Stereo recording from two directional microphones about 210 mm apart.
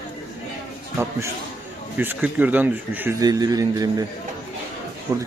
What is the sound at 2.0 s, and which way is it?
Speech, 10° right (ahead or behind).